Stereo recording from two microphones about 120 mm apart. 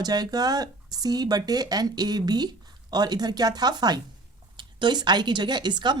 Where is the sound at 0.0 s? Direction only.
30° right (ahead or behind).